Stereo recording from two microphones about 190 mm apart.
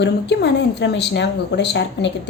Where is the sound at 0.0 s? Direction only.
65° left (ahead or behind).